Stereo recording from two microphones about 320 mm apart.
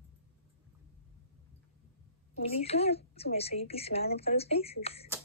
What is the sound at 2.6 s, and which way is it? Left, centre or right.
Speech, centre.